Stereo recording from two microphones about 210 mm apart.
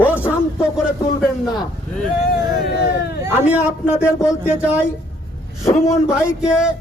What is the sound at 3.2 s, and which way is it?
Speech, 5° right (ahead or behind).